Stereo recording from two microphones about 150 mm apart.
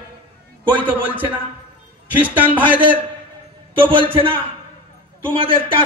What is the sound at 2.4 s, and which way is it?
Speech, 10° right (ahead or behind).